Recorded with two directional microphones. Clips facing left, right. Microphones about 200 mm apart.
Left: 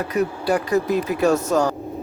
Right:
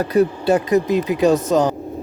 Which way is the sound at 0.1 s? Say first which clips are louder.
Right 5 dB; 30° right (ahead or behind).